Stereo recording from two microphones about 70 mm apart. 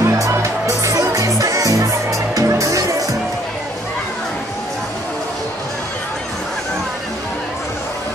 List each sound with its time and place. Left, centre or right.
0.0 s music: right